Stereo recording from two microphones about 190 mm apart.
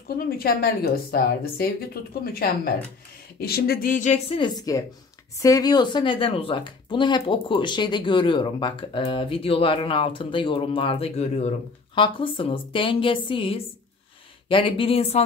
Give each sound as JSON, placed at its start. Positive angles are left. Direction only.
{"t": 0.4, "sound": "a woman's voice", "side_deg": 55}
{"t": 4.4, "sound": "speech", "side_deg": 20}